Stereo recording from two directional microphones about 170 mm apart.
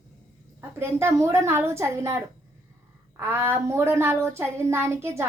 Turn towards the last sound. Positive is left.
turn(degrees=-15)  # may be behind; listen again after turning